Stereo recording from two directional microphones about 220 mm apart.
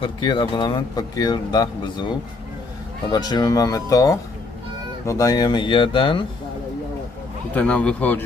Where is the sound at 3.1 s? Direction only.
20° left (ahead or behind).